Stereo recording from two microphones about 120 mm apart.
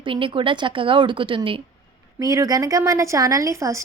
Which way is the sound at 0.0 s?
45° right (ahead or behind).